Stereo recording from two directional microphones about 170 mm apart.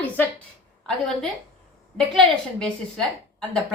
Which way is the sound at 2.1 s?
Centre (ahead or behind).